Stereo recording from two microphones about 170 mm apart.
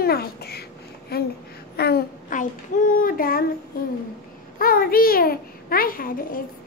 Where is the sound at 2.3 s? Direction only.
50° left (ahead or behind).